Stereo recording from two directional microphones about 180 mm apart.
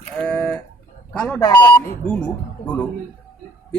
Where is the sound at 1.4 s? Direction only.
25° left (ahead or behind).